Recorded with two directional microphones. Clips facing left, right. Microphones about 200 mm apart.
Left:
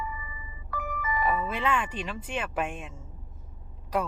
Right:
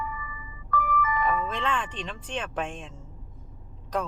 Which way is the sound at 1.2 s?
10° left (ahead or behind).